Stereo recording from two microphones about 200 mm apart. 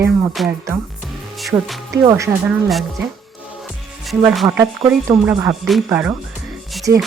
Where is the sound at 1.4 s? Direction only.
Centre (ahead or behind).